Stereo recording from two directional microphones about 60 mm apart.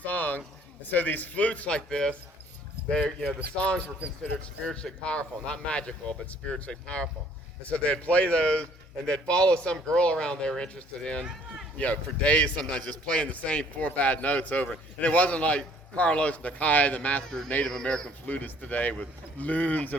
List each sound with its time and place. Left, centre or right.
0.0 s a sound: left
0.9 s a man's voice: left
17.7 s speech: centre
18.3 s a man's voice: left